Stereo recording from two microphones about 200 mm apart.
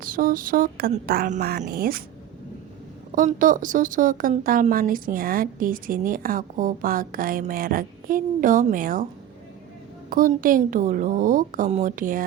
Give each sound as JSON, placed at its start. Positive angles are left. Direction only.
{"t": 0.0, "sound": "speech", "side_deg": -45}
{"t": 3.2, "sound": "speech", "side_deg": -40}
{"t": 10.1, "sound": "a woman's voice", "side_deg": -45}